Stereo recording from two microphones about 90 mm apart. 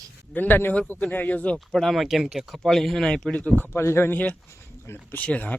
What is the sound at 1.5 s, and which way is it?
Speech, centre (ahead or behind).